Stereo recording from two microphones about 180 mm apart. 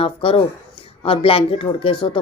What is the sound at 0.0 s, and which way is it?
Speech, 30° left (ahead or behind).